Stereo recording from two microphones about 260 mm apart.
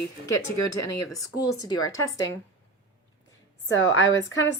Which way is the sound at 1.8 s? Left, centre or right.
Left.